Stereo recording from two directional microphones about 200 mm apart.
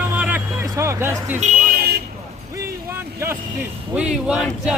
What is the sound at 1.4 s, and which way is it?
Speech, 35° right (ahead or behind).